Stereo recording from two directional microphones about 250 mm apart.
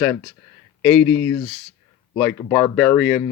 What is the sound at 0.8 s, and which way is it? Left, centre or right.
Speech, centre.